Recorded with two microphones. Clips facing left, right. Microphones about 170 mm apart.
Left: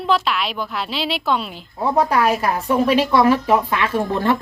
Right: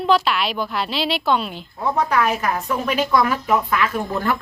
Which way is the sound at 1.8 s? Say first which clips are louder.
Left 3 dB; 30° left (ahead or behind).